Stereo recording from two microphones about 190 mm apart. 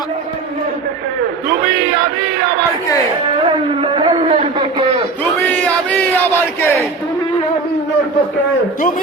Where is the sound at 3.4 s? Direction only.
30° right (ahead or behind).